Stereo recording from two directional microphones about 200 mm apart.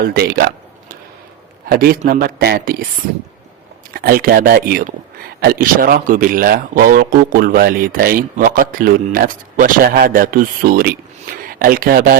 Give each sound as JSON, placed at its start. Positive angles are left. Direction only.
{"t": 0.0, "sound": "a man's voice", "side_deg": -50}
{"t": 3.9, "sound": "a man's voice", "side_deg": -45}